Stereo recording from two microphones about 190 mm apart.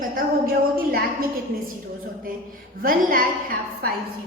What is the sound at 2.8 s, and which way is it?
A woman's voice, 45° right (ahead or behind).